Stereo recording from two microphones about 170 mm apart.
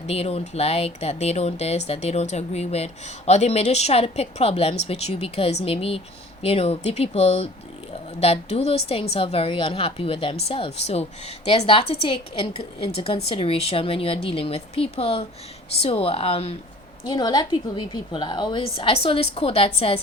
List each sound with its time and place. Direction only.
0.1 s a woman's voice: 35° left (ahead or behind)